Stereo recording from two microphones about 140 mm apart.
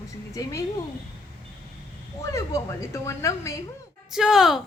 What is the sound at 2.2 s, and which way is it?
A woman's voice, 20° left (ahead or behind).